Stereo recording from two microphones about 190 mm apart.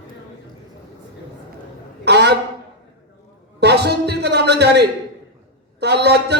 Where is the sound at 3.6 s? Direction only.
60° right (ahead or behind).